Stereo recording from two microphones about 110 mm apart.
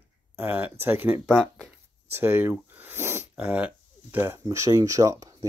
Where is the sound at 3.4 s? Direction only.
10° right (ahead or behind).